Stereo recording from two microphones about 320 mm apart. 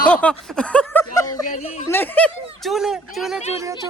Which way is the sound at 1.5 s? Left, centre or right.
Left.